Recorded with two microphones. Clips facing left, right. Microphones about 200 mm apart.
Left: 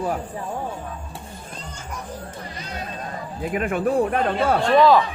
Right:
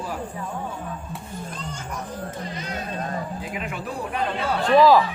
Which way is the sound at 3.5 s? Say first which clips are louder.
Left 13 dB; 50° left (ahead or behind).